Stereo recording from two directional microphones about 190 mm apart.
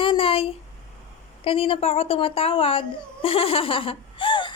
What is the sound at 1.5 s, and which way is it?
A woman's voice, 30° left (ahead or behind).